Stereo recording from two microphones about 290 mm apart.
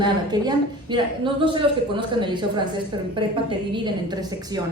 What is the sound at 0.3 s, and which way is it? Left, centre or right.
A woman's voice, centre.